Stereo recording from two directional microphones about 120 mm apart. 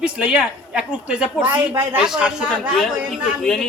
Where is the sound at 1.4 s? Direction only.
20° right (ahead or behind).